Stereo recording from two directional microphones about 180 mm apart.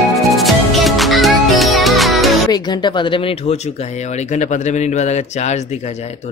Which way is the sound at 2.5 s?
25° left (ahead or behind).